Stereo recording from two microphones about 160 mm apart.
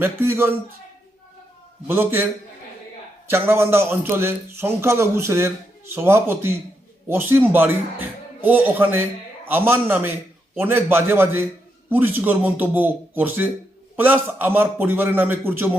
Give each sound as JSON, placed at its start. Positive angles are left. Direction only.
{"t": 0.0, "sound": "a man's voice", "side_deg": -15}
{"t": 1.9, "sound": "a man's voice", "side_deg": -15}
{"t": 3.2, "sound": "a man's voice", "side_deg": -15}